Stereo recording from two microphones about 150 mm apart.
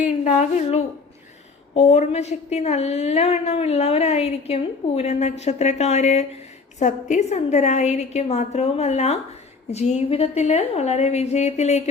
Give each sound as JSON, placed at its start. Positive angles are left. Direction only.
{"t": 0.3, "sound": "a woman's voice", "side_deg": 50}